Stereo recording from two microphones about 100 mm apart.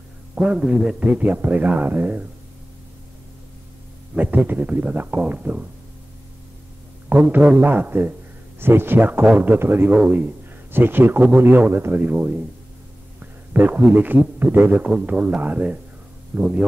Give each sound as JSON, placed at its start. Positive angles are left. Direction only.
{"t": 0.4, "sound": "a man's voice", "side_deg": -10}
{"t": 4.1, "sound": "a man's voice", "side_deg": -15}
{"t": 7.1, "sound": "a man's voice", "side_deg": -15}